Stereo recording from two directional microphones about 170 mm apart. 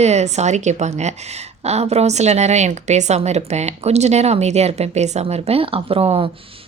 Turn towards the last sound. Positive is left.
turn(degrees=-35)  # may be behind; listen again after turning